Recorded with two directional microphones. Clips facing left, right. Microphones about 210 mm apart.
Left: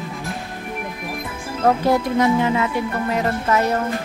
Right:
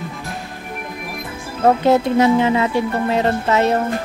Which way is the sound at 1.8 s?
25° right (ahead or behind).